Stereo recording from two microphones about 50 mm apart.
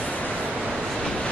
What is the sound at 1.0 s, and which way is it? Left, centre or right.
Vehicle, centre.